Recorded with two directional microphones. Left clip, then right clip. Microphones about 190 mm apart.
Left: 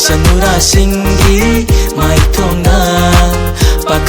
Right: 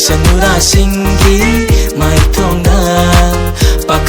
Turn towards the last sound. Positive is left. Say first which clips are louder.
# even
turn(degrees=0)  # may be behind; listen again after turning